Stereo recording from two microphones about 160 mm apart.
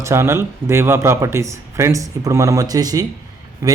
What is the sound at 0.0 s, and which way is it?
Speech, 15° right (ahead or behind).